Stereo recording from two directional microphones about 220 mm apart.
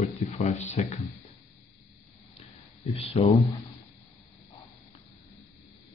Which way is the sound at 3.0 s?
25° left (ahead or behind).